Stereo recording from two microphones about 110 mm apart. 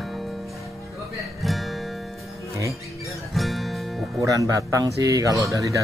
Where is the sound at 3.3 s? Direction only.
Centre (ahead or behind).